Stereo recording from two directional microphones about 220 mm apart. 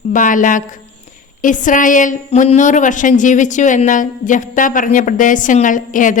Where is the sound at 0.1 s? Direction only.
35° left (ahead or behind).